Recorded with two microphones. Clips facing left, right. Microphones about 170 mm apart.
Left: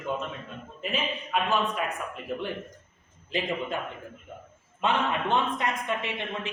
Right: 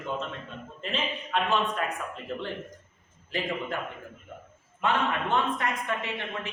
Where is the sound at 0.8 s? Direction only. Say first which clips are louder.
Left 1 dB; 5° left (ahead or behind).